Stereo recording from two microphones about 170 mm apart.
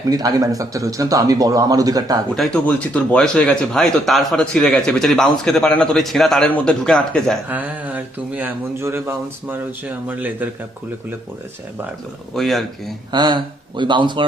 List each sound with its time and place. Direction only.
0.1 s a man's voice: 20° right (ahead or behind)
2.3 s speech: 5° left (ahead or behind)
7.4 s speech: 10° right (ahead or behind)
12.3 s speech: centre (ahead or behind)
13.1 s a man's voice: 25° right (ahead or behind)